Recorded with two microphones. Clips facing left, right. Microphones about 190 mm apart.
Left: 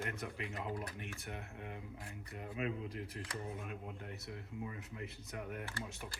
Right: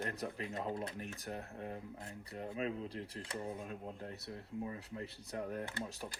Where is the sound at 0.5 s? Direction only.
25° right (ahead or behind).